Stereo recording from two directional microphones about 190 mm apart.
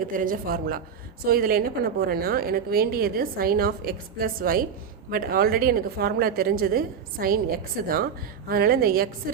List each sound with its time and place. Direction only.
0.0 s a woman's voice: 45° right (ahead or behind)
8.4 s a woman's voice: 55° right (ahead or behind)